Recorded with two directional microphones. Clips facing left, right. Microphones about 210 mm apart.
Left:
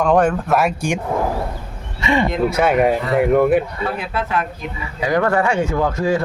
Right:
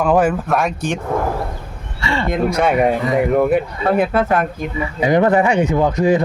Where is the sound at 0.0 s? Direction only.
5° right (ahead or behind).